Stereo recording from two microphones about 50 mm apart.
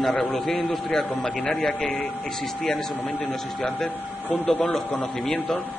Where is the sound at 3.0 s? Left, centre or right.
Left.